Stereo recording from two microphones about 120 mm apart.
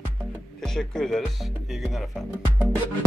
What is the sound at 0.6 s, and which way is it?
Speech, 5° left (ahead or behind).